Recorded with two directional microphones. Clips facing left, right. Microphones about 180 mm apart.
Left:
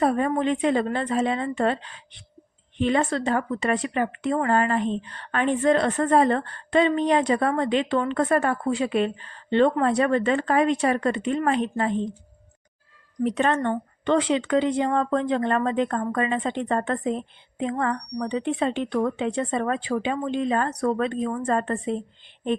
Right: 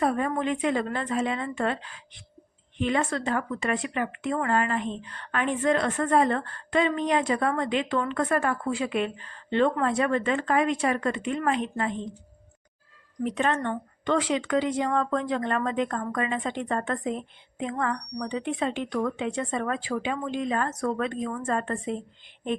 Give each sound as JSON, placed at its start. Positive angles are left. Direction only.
{"t": 0.0, "sound": "a woman's voice", "side_deg": 30}
{"t": 13.2, "sound": "a woman's voice", "side_deg": 40}